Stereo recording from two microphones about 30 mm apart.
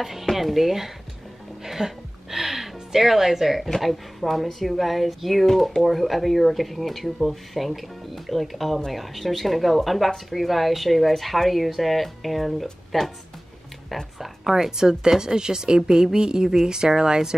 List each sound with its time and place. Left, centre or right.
0.0 s speech: centre
1.6 s music: centre
3.8 s speech: centre
14.8 s speech: right